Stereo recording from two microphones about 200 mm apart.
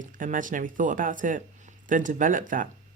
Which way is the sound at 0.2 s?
40° right (ahead or behind).